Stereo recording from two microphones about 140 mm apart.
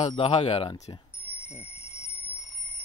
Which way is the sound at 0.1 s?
40° left (ahead or behind).